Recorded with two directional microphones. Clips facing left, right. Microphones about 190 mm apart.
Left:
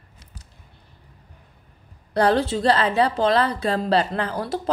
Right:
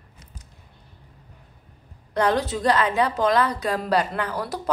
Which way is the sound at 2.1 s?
30° left (ahead or behind).